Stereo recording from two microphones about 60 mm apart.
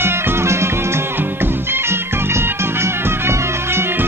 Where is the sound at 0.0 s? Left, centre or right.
Right.